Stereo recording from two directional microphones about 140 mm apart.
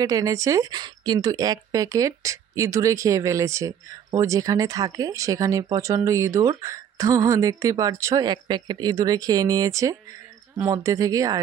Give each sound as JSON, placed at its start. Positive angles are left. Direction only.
{"t": 0.0, "sound": "speech", "side_deg": -25}